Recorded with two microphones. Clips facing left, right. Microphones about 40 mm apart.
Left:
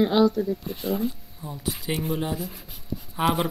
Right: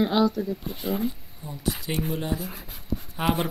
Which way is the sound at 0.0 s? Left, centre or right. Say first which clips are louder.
Left 2 dB; centre.